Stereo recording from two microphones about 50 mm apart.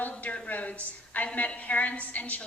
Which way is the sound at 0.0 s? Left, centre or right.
Left.